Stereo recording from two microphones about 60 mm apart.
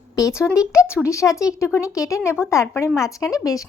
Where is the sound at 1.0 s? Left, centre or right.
Left.